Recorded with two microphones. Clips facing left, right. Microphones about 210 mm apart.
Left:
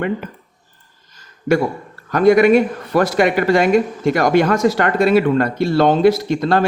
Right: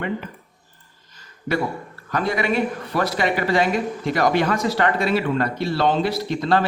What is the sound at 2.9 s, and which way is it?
Speech, 50° left (ahead or behind).